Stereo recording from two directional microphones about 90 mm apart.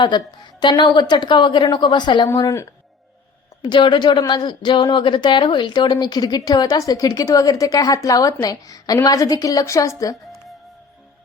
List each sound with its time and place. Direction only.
0.0 s a woman's voice: 55° left (ahead or behind)
2.3 s a woman's voice: 35° left (ahead or behind)
3.6 s a woman's voice: 55° left (ahead or behind); by 10.2 s 35° left (ahead or behind)